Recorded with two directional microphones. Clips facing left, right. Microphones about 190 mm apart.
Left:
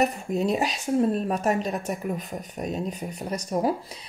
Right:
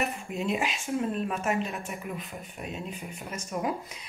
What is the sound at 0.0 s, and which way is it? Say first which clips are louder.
Speech: left 7 dB; 40° left (ahead or behind).